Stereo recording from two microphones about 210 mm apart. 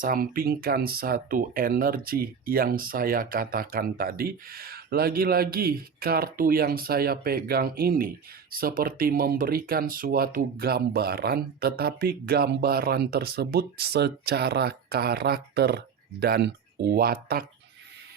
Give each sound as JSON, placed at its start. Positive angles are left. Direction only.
{"t": 0.0, "sound": "speech", "side_deg": -45}